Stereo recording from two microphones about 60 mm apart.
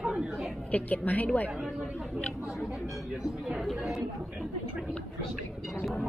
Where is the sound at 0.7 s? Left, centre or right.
Left.